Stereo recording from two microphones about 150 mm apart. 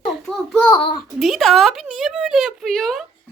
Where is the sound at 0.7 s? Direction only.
35° left (ahead or behind).